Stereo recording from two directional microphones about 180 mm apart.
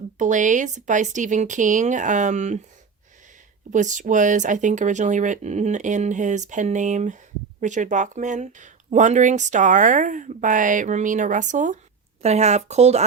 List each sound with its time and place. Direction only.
0.2 s speech: 45° right (ahead or behind)
3.7 s speech: 45° right (ahead or behind)